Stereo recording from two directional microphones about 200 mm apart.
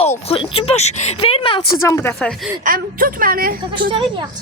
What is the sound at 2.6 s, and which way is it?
Speech, 45° right (ahead or behind).